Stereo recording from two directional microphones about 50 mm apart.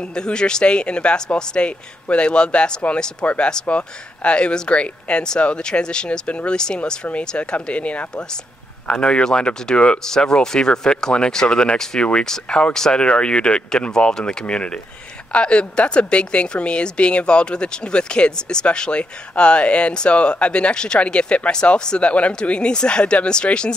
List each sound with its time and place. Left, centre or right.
0.1 s a woman's voice: centre